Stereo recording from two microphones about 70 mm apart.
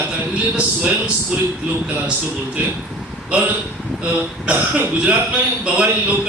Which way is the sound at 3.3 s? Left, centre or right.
Centre.